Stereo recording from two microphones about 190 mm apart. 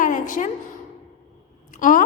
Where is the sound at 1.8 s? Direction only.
45° left (ahead or behind).